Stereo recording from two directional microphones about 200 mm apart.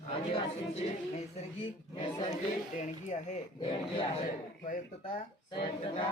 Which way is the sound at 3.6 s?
25° left (ahead or behind).